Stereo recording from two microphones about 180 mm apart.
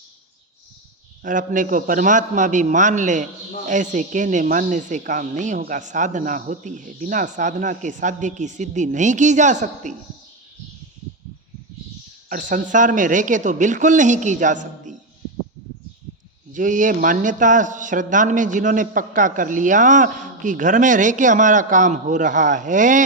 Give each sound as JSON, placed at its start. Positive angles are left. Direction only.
{"t": 1.2, "sound": "speech", "side_deg": -45}
{"t": 12.3, "sound": "speech", "side_deg": -45}
{"t": 16.5, "sound": "speech", "side_deg": -45}